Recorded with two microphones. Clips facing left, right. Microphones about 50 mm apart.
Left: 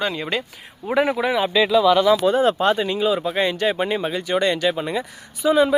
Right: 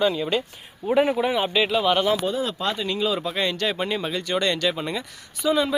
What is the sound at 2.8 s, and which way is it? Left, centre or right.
Speech, centre.